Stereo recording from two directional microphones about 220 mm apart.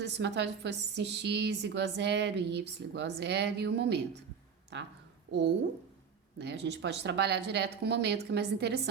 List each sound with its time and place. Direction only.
0.0 s a woman's voice: 50° right (ahead or behind)
6.4 s a woman's voice: 50° right (ahead or behind)